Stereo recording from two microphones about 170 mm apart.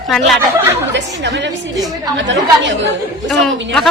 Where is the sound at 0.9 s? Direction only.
90° right.